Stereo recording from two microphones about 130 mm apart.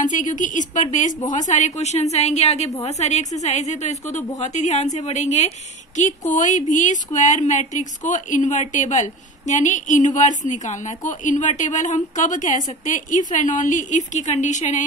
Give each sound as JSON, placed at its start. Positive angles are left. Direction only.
{"t": 0.0, "sound": "a woman's voice", "side_deg": 75}